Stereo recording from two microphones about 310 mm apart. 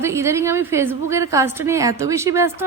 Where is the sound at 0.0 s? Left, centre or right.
Centre.